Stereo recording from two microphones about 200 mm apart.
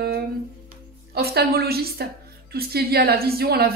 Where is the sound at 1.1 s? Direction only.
50° right (ahead or behind).